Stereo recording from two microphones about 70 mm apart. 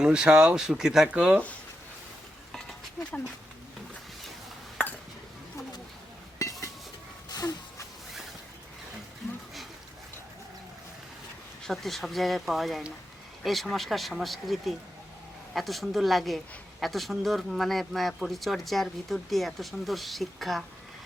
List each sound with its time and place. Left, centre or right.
0.0 s speech: centre
6.4 s dishes: left
7.3 s a sound: left
11.6 s speech: centre